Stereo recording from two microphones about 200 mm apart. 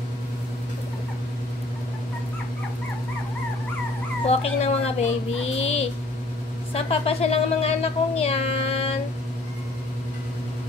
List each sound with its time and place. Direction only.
4.3 s speech: 30° left (ahead or behind)